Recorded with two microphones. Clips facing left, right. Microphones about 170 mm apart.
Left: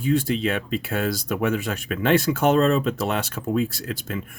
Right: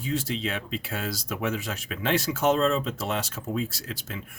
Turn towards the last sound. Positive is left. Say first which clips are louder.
# left 7 dB
turn(degrees=55)  # may be behind; listen again after turning